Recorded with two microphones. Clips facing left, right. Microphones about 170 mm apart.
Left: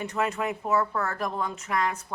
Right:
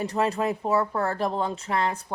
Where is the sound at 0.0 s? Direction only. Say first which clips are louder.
Right 3 dB; 35° right (ahead or behind).